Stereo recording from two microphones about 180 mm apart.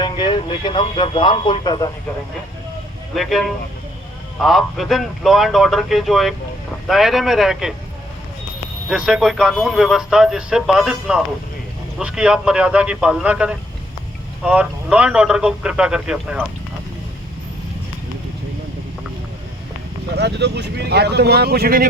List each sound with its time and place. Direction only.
0.0 s speech: 25° left (ahead or behind)
3.2 s speech: centre (ahead or behind)
8.9 s a man's voice: 5° right (ahead or behind)
20.1 s speech: 70° right (ahead or behind)